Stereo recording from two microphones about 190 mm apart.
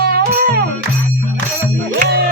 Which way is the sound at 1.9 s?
60° right (ahead or behind).